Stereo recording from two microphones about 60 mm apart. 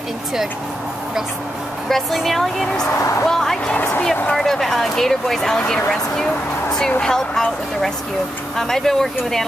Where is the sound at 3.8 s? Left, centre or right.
Left.